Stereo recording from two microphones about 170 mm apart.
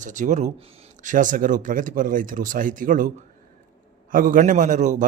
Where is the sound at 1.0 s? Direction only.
50° right (ahead or behind).